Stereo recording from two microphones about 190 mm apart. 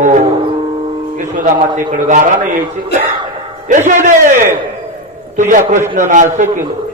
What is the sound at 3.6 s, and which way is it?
A man's voice, 40° right (ahead or behind).